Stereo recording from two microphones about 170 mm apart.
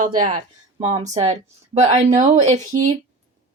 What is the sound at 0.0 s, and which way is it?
A woman's voice, 55° right (ahead or behind).